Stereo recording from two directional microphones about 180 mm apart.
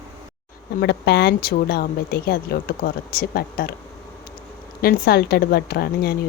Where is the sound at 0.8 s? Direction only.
65° left (ahead or behind).